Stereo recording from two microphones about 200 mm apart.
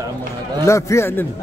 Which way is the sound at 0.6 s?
15° left (ahead or behind).